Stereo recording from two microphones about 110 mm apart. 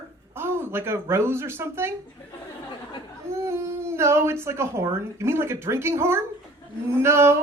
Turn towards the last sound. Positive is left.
turn(degrees=-25)  # may be behind; listen again after turning